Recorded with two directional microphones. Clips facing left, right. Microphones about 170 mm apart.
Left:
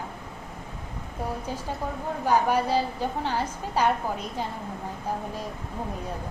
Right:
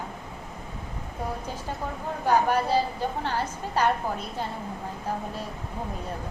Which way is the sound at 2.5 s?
10° left (ahead or behind).